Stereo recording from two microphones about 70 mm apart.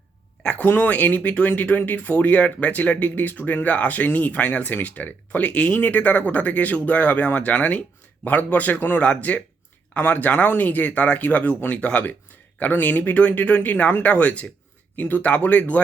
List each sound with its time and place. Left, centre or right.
0.6 s speech: left